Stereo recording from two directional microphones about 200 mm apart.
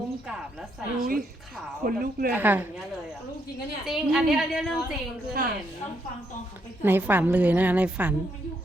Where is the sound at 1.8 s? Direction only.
45° right (ahead or behind).